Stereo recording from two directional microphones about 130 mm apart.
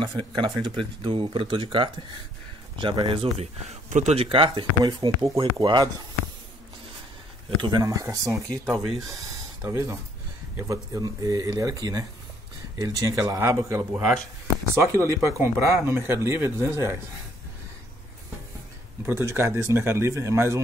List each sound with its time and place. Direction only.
0.0 s speech: 40° right (ahead or behind)
3.9 s a man's voice: 65° right (ahead or behind)
4.2 s speech: 45° right (ahead or behind)
7.6 s speech: 30° right (ahead or behind)
11.0 s speech: 30° right (ahead or behind)
19.0 s speech: 20° right (ahead or behind)